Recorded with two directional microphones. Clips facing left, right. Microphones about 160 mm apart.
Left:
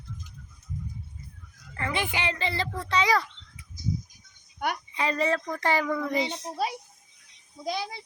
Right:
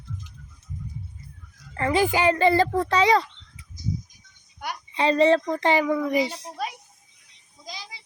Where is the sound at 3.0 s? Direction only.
25° right (ahead or behind).